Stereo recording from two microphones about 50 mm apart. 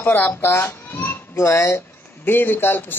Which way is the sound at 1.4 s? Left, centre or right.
Left.